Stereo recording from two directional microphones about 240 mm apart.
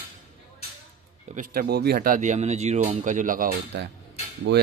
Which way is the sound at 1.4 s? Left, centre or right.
Right.